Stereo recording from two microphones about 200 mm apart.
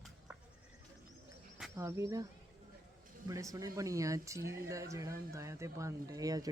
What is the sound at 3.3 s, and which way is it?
Speech, 15° right (ahead or behind).